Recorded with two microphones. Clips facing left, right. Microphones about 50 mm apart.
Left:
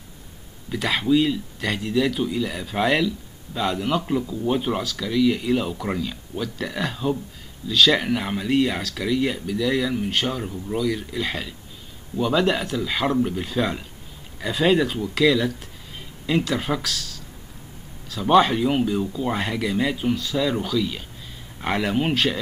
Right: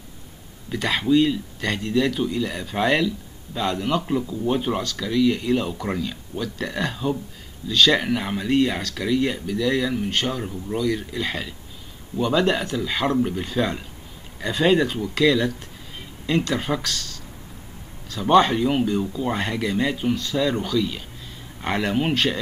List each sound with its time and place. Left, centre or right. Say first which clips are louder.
0.7 s speech: even; centre